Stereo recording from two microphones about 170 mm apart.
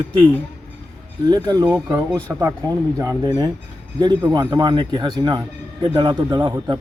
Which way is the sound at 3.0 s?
20° right (ahead or behind).